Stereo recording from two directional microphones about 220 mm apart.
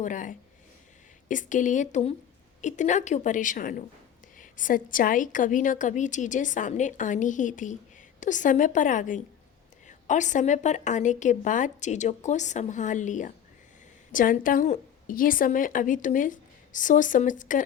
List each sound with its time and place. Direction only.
0.0 s a woman's voice: 35° left (ahead or behind)